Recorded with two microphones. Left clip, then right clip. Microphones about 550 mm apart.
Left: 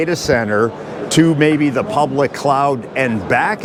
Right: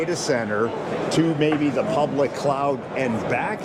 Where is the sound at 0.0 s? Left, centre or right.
Left.